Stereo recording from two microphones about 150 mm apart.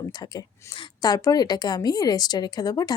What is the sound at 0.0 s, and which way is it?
A woman's voice, 25° left (ahead or behind).